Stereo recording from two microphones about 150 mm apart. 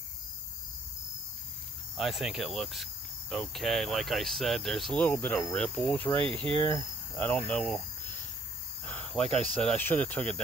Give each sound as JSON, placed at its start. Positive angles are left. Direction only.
{"t": 2.0, "sound": "cricket", "side_deg": 0}
{"t": 6.2, "sound": "speech", "side_deg": -35}
{"t": 6.6, "sound": "speech", "side_deg": 10}
{"t": 8.8, "sound": "cricket", "side_deg": 5}
{"t": 9.4, "sound": "speech", "side_deg": 10}